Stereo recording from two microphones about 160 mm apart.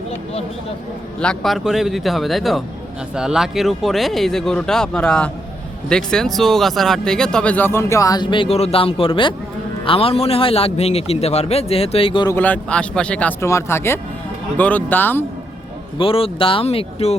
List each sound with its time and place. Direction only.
1.2 s a man's voice: 5° left (ahead or behind); by 12.3 s 35° left (ahead or behind)
12.3 s speech: 10° left (ahead or behind)
16.0 s a man's voice: 35° left (ahead or behind)